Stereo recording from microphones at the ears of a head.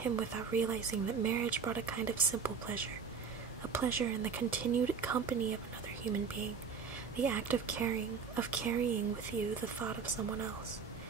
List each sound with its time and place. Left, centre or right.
0.0 s speech: right